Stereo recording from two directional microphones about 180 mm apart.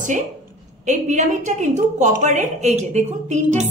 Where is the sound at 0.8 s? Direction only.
40° right (ahead or behind).